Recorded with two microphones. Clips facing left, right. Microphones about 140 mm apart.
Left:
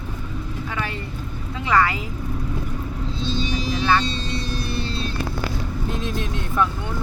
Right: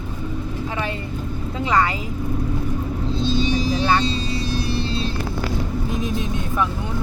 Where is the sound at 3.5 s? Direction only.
35° right (ahead or behind).